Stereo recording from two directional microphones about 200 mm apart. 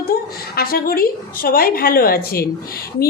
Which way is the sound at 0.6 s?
50° left (ahead or behind).